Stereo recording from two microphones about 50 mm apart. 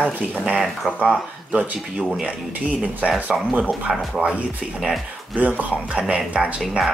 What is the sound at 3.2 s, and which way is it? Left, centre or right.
Speech, right.